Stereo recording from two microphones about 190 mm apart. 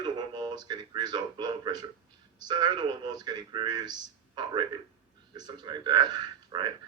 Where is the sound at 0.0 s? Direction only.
25° right (ahead or behind).